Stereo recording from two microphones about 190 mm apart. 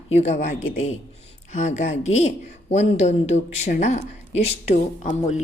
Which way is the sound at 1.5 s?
35° left (ahead or behind).